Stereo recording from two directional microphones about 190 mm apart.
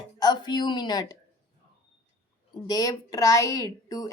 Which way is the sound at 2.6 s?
20° left (ahead or behind).